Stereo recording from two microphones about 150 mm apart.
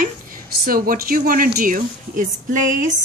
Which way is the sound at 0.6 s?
75° right (ahead or behind).